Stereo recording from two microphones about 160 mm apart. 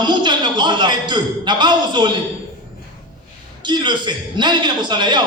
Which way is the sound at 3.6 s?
30° right (ahead or behind).